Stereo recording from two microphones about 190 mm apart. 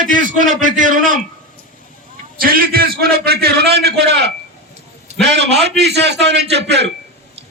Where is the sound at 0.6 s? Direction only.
45° right (ahead or behind).